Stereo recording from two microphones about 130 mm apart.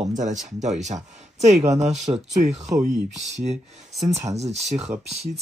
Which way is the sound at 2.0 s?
60° right (ahead or behind).